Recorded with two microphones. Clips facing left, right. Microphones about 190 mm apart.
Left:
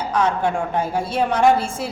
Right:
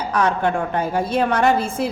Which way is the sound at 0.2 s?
60° right (ahead or behind).